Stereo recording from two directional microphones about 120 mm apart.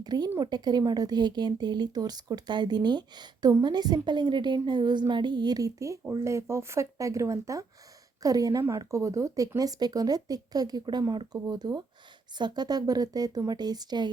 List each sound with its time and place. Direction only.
0.0 s a woman's voice: 35° right (ahead or behind)